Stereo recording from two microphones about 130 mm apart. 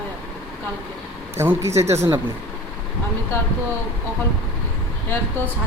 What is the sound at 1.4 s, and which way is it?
Speech, 20° right (ahead or behind).